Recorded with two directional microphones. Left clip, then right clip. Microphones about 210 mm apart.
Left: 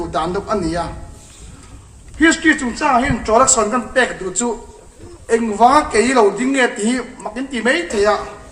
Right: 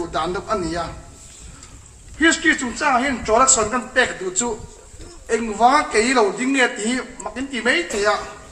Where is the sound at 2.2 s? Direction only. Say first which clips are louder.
Left 3 dB; 40° left (ahead or behind).